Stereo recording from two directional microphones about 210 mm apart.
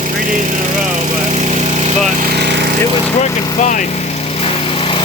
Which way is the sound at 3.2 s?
35° left (ahead or behind).